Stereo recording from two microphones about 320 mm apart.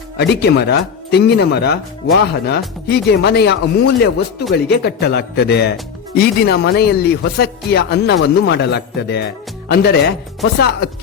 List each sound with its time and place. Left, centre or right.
0.2 s speech: left